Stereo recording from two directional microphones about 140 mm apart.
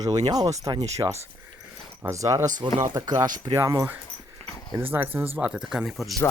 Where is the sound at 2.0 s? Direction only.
25° right (ahead or behind).